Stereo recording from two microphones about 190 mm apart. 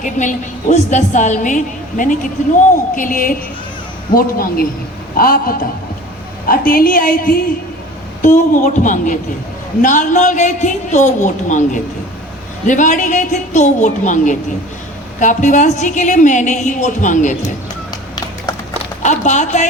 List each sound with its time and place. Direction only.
0.0 s a woman's voice: 40° left (ahead or behind)
19.0 s a woman's voice: 40° left (ahead or behind)